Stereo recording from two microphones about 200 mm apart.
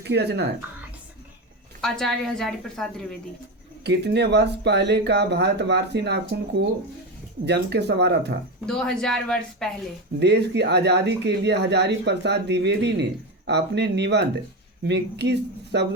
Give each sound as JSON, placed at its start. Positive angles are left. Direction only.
{"t": 0.1, "sound": "speech", "side_deg": -55}
{"t": 1.8, "sound": "speech", "side_deg": 0}
{"t": 3.8, "sound": "speech", "side_deg": -55}
{"t": 7.4, "sound": "speech", "side_deg": -60}
{"t": 8.6, "sound": "speech", "side_deg": 5}
{"t": 10.2, "sound": "speech", "side_deg": -60}